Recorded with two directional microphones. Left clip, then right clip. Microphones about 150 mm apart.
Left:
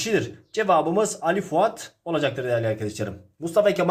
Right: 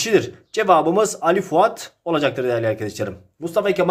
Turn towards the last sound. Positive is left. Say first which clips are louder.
# right 1 dB
turn(degrees=-10)  # may be behind; listen again after turning